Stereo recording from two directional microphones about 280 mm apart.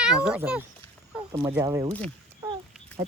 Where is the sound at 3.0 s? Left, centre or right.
Right.